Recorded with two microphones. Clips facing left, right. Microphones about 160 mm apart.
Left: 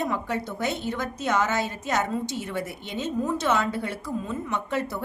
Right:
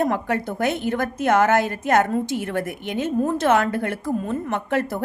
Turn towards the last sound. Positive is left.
turn(degrees=-55)  # may be behind; listen again after turning